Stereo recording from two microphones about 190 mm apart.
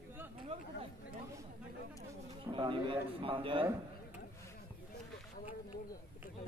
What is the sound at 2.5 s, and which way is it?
Speech, 25° right (ahead or behind).